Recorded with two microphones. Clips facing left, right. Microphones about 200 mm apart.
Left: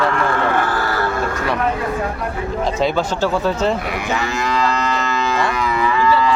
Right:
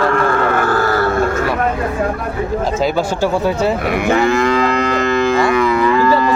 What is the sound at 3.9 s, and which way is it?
Moo, 55° right (ahead or behind).